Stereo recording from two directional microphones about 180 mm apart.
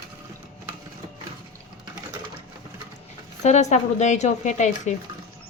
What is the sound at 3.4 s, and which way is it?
Speech, 40° left (ahead or behind).